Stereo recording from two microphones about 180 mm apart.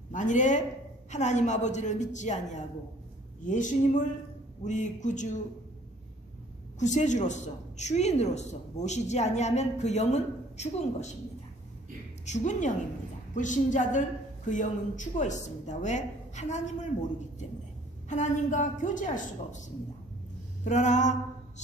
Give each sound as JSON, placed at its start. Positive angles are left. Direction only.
{"t": 0.1, "sound": "a woman's voice", "side_deg": 45}
{"t": 6.8, "sound": "a woman's voice", "side_deg": 40}
{"t": 12.3, "sound": "a woman's voice", "side_deg": 45}
{"t": 18.0, "sound": "a woman's voice", "side_deg": 40}
{"t": 20.6, "sound": "a sound", "side_deg": 40}